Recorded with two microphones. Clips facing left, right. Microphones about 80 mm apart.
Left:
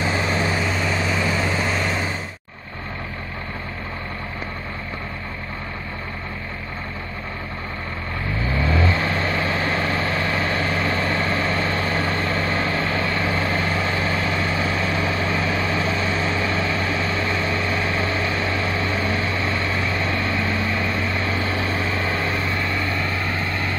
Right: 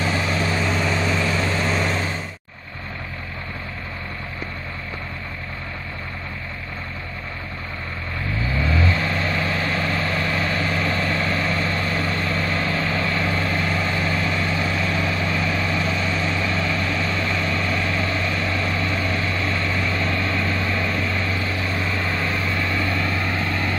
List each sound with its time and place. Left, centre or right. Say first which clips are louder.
0.0 s vehicle: left 1 dB; centre
0.6 s vehicle: right 1 dB; centre
8.5 s vehicle: left 1 dB; left; by 23.8 s centre